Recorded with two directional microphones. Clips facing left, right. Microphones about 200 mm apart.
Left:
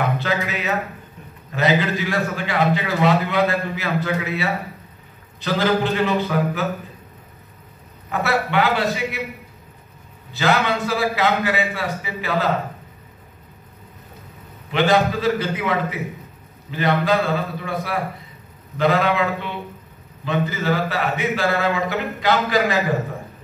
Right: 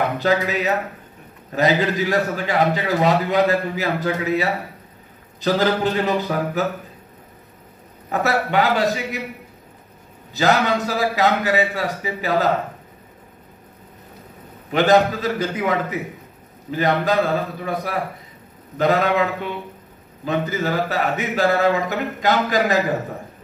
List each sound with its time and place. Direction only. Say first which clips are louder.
0.2 s a man's voice: right 5 dB; 40° right (ahead or behind)
8.1 s a man's voice: right 1 dB; 40° right (ahead or behind)
10.3 s a man's voice: right 2 dB; 40° right (ahead or behind)
14.7 s a man's voice: right 2 dB; 40° right (ahead or behind)
20.2 s a man's voice: even; 45° right (ahead or behind)